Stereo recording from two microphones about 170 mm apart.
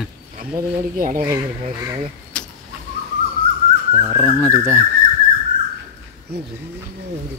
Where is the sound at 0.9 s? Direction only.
55° right (ahead or behind).